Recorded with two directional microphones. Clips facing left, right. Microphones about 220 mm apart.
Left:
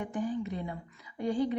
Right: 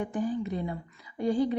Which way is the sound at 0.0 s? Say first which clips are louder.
Right 3 dB; 35° right (ahead or behind).